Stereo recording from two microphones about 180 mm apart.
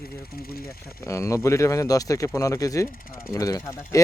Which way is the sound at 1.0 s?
15° left (ahead or behind).